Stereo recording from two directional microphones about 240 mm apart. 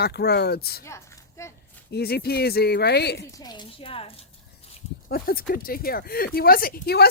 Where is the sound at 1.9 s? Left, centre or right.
Left.